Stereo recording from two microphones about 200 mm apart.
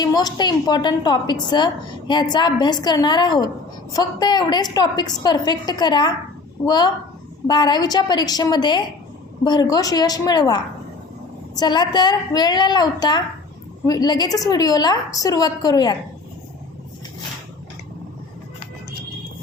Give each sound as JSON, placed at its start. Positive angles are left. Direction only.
{"t": 0.0, "sound": "a woman's voice", "side_deg": 20}